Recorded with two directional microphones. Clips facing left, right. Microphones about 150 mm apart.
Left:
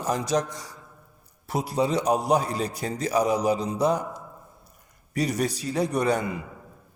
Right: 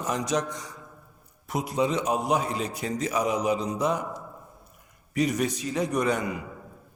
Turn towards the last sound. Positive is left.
turn(degrees=30)  # may be behind; listen again after turning